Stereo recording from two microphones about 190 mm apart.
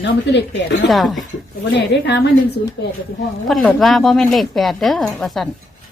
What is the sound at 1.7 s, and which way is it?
A woman's voice, 65° left (ahead or behind).